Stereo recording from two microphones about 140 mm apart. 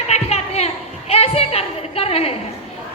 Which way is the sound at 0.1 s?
50° left (ahead or behind).